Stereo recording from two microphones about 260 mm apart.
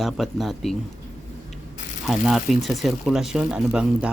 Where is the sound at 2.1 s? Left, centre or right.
Centre.